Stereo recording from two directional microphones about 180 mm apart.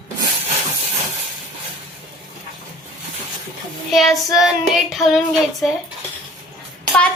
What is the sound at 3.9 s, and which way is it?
A woman's voice, centre (ahead or behind).